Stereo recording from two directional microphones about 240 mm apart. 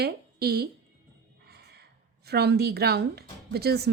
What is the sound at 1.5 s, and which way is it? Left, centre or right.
Gasp, right.